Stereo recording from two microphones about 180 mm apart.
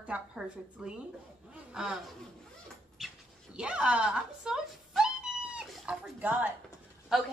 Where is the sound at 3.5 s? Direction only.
5° right (ahead or behind).